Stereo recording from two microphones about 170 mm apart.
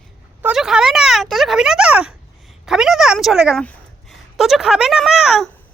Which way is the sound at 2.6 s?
5° right (ahead or behind).